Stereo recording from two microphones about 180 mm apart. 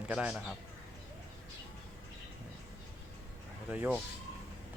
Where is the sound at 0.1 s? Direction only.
5° right (ahead or behind).